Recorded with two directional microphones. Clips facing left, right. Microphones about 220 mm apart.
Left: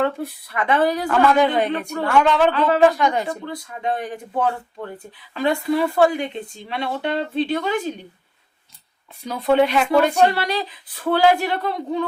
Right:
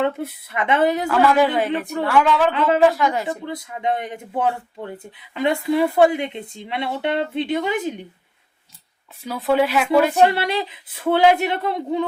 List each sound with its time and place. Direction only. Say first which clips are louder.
0.0 s speech: even; 20° right (ahead or behind)
1.0 s speech: even; 5° right (ahead or behind)
2.5 s speech: even; 20° right (ahead or behind)
2.9 s speech: left 1 dB; 5° right (ahead or behind)
3.2 s speech: right 1 dB; 20° right (ahead or behind)
9.2 s speech: left 2 dB; 5° right (ahead or behind)
10.3 s speech: right 1 dB; 25° right (ahead or behind)